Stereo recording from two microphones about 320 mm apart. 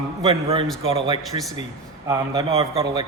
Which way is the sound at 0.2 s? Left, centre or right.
Centre.